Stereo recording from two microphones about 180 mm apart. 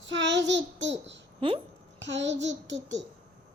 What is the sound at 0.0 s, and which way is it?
Child singing, 85° right.